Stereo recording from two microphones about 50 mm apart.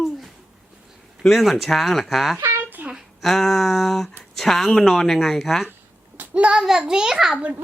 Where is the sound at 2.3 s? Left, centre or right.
Right.